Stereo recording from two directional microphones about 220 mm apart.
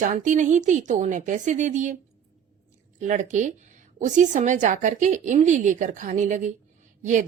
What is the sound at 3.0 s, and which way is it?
A woman's voice, 35° right (ahead or behind).